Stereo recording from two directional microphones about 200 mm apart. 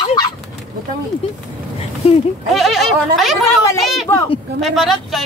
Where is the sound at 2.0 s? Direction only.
30° left (ahead or behind).